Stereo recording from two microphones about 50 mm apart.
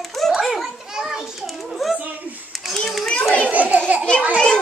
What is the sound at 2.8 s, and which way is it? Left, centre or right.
Speech, centre.